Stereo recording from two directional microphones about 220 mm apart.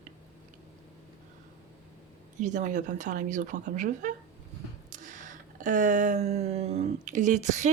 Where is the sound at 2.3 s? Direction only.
35° right (ahead or behind).